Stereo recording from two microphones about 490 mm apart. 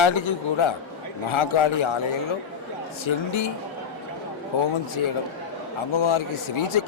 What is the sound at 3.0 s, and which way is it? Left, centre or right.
Speech, left.